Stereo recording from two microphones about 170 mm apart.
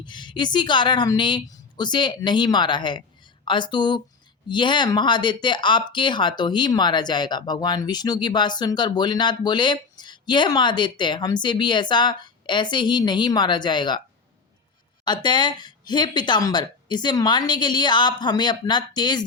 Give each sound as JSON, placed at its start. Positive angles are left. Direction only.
{"t": 0.0, "sound": "speech", "side_deg": 25}
{"t": 15.0, "sound": "speech", "side_deg": 25}